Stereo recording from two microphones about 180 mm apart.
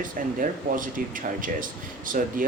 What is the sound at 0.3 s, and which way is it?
Speech, 50° right (ahead or behind).